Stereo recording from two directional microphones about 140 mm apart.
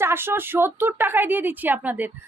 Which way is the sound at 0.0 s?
15° right (ahead or behind).